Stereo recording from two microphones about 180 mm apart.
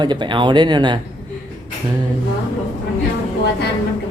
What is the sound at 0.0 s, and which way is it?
Speech, 25° right (ahead or behind).